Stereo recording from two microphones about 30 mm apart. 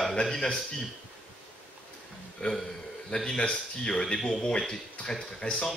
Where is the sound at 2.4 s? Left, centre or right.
Left.